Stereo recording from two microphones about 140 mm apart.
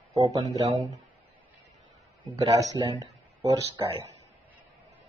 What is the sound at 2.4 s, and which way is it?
Speech, 25° right (ahead or behind).